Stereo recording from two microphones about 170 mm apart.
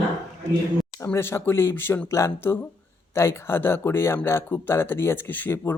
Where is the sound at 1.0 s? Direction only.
15° left (ahead or behind).